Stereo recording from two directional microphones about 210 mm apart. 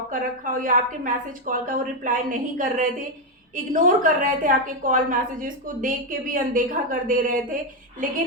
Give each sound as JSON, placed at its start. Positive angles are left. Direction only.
{"t": 0.1, "sound": "a woman's voice", "side_deg": -40}